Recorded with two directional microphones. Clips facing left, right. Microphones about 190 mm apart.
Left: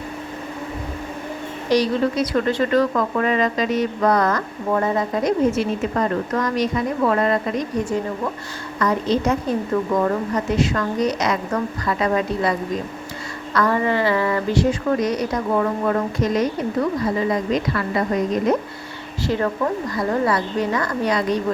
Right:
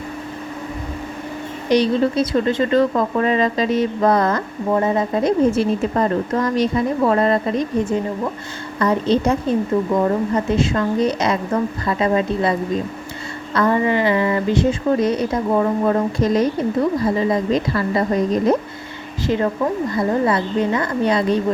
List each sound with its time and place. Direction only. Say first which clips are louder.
1.7 s speech: right 2 dB; 25° right (ahead or behind)
8.8 s a woman's voice: right 3 dB; 30° right (ahead or behind)
19.3 s speech: right 2 dB; 20° right (ahead or behind)